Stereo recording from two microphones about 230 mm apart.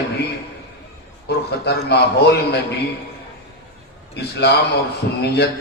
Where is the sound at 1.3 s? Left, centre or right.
Left.